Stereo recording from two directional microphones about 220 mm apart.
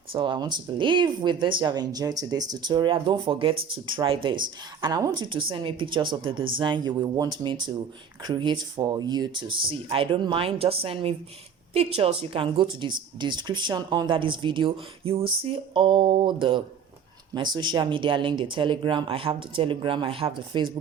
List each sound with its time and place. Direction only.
0.1 s speech: 25° right (ahead or behind)